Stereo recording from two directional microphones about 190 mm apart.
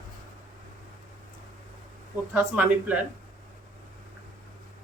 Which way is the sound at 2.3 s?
5° right (ahead or behind).